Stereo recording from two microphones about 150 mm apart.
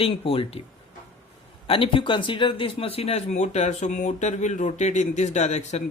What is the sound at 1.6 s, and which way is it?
Speech, 35° left (ahead or behind).